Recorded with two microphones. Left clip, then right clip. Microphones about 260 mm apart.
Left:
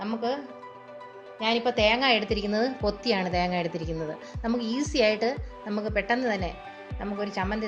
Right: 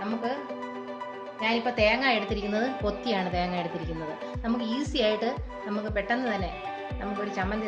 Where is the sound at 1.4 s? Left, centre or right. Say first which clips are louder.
Left 1 dB; left.